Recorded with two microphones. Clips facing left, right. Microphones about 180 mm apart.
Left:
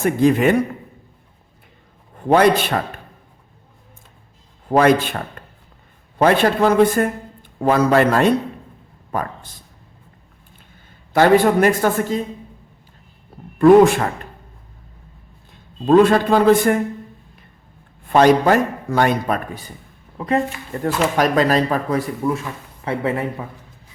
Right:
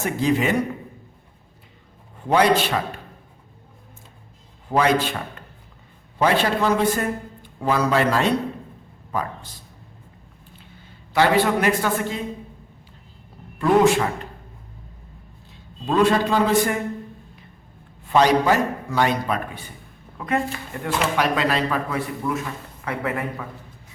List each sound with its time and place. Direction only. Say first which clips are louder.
0.0 s a man's voice: left 6 dB; 55° left (ahead or behind)
2.1 s a man's voice: left 4 dB; 50° left (ahead or behind)
4.7 s a man's voice: left 5 dB; 50° left (ahead or behind)
5.4 s a sound: left 3 dB; 50° left (ahead or behind)
6.1 s a man's voice: left 5 dB; 55° left (ahead or behind)
10.6 s a woman's voice: right 2 dB; 50° left (ahead or behind)
13.6 s a man's voice: left 7 dB; 50° left (ahead or behind)
15.9 s a man's voice: left 6 dB; 55° left (ahead or behind)
18.0 s a man's voice: left 4 dB; 55° left (ahead or behind); by 20.4 s 30° left (ahead or behind)
20.8 s speech: left 4 dB; 40° left (ahead or behind); by 23.5 s 25° left (ahead or behind)